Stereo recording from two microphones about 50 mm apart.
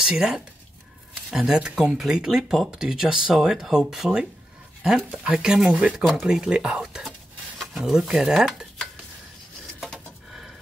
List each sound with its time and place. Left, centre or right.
0.0 s speech: centre
5.7 s speech: right
6.2 s speech: centre
7.5 s speech: centre